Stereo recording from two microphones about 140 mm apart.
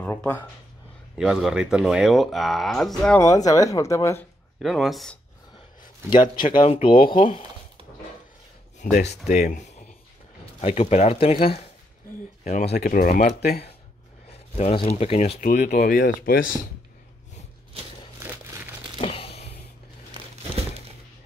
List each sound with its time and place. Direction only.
0.0 s a sound: 10° left (ahead or behind)
1.1 s speech: 5° right (ahead or behind)
3.2 s speech: 25° left (ahead or behind)
4.6 s speech: centre (ahead or behind)
6.4 s speech: 40° left (ahead or behind)
8.7 s speech: 55° left (ahead or behind)
12.4 s speech: 70° left (ahead or behind); by 13.6 s 90° left
14.6 s speech: 50° left (ahead or behind)
15.4 s speech: 60° left (ahead or behind); by 16.4 s 90° left
17.8 s a sound: 45° right (ahead or behind)
18.9 s a sound: 40° left (ahead or behind)